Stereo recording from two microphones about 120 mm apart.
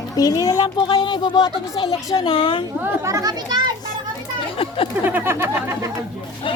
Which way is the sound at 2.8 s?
25° right (ahead or behind).